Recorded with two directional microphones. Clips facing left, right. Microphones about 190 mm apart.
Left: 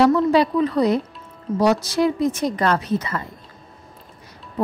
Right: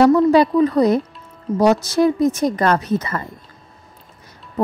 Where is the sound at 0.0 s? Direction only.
45° right (ahead or behind).